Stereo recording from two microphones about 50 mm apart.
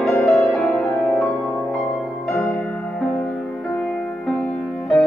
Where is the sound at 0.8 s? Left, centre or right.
Left.